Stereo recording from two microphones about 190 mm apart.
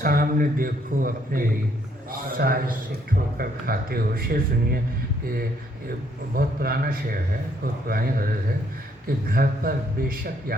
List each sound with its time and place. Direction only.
0.0 s speech: 50° right (ahead or behind)
6.3 s speech: 50° right (ahead or behind)